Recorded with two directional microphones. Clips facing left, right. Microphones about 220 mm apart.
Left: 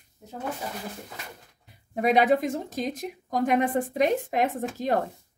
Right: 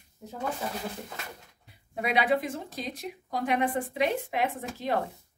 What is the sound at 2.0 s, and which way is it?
A woman's voice, 45° left (ahead or behind).